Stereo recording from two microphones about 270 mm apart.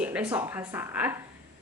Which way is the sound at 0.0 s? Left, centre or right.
Centre.